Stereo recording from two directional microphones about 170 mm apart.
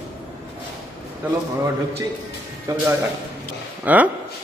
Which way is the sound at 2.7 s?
20° right (ahead or behind).